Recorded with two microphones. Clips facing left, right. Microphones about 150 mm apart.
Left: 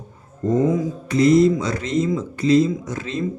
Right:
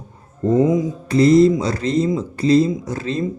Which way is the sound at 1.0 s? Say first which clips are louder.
Right 2 dB; 35° right (ahead or behind).